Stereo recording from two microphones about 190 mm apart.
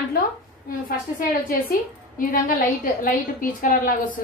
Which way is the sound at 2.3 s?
45° left (ahead or behind).